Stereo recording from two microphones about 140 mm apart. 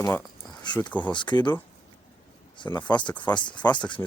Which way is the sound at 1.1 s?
35° left (ahead or behind).